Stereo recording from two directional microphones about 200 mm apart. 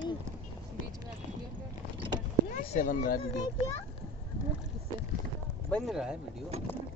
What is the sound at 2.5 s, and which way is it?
Speech, 40° left (ahead or behind).